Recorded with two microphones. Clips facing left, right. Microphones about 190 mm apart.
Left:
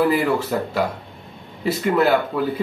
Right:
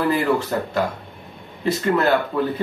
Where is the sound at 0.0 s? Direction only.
10° left (ahead or behind).